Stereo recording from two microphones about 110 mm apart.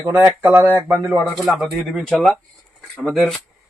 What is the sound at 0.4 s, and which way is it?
Speech, 15° right (ahead or behind).